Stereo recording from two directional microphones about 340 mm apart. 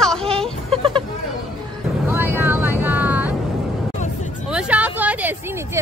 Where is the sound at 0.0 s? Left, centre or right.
Centre.